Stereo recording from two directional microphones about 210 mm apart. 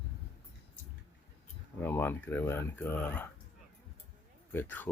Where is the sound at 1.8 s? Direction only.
10° left (ahead or behind).